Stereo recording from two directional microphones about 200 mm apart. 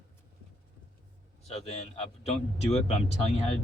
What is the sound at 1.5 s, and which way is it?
Speech, 30° left (ahead or behind).